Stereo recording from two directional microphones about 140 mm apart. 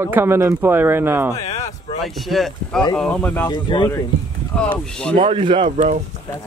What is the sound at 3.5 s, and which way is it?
Speech, 30° left (ahead or behind).